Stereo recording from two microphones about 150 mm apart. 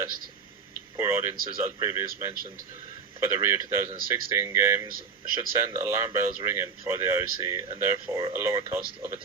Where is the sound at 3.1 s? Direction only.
20° right (ahead or behind).